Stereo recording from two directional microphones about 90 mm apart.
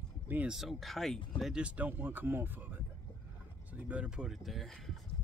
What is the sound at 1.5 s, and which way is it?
Speech, 15° right (ahead or behind).